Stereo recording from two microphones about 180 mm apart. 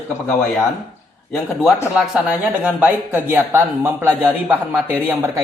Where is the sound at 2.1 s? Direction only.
5° right (ahead or behind).